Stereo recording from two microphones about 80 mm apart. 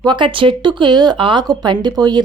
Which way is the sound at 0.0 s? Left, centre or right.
Right.